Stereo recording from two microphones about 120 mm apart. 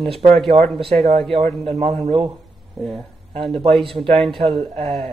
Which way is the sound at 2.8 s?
Centre (ahead or behind).